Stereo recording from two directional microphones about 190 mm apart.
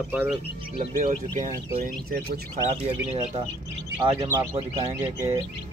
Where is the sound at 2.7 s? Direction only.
30° right (ahead or behind).